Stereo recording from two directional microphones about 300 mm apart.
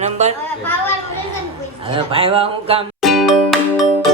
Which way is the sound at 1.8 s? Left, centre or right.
Centre.